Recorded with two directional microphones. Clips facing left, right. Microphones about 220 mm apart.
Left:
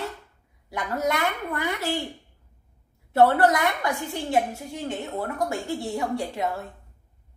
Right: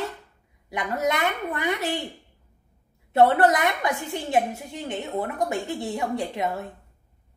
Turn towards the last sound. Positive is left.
turn(degrees=-20)  # may be behind; listen again after turning